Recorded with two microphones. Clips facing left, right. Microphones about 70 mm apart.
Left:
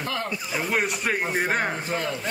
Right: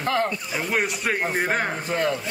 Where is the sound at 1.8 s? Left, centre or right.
Right.